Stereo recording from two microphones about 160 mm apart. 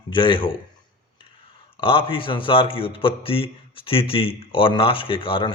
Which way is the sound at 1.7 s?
35° left (ahead or behind).